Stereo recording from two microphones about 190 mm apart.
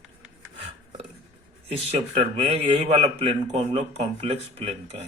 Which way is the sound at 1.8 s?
30° right (ahead or behind).